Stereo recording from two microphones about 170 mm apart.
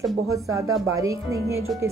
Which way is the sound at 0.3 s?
20° right (ahead or behind).